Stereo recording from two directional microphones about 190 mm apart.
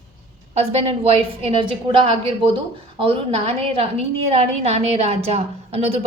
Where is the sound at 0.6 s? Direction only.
35° right (ahead or behind).